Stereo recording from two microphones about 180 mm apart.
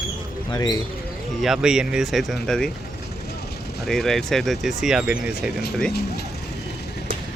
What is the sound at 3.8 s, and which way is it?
Speech, centre (ahead or behind).